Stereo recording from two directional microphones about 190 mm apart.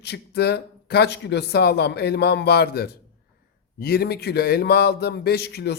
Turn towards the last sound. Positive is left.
turn(degrees=60)  # may be behind; listen again after turning